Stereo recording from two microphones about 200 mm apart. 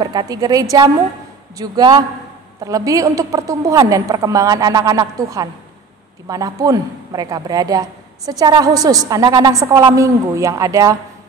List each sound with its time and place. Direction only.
0.0 s a woman's voice: 20° right (ahead or behind)